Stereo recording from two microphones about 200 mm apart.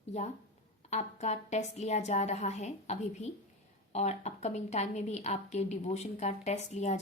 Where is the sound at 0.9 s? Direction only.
35° left (ahead or behind).